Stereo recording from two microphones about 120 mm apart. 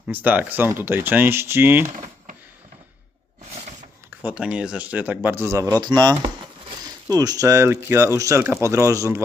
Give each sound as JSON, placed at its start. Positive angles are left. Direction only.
{"t": 0.1, "sound": "speech", "side_deg": -15}
{"t": 4.1, "sound": "speech", "side_deg": -15}
{"t": 5.8, "sound": "speech", "side_deg": -35}